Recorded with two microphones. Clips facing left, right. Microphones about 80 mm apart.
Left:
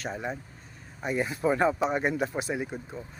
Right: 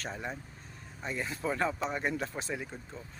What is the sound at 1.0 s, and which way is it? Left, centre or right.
Speech, centre.